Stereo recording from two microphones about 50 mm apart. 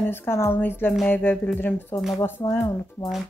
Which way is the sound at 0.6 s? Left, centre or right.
Left.